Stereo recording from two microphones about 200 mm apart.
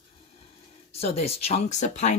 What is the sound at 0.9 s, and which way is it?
Speech, 30° left (ahead or behind).